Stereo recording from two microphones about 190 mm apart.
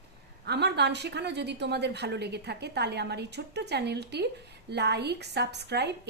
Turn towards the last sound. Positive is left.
turn(degrees=-60)  # may be behind; listen again after turning